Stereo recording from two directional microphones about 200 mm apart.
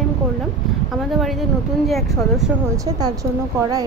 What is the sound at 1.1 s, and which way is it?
Speech, centre (ahead or behind).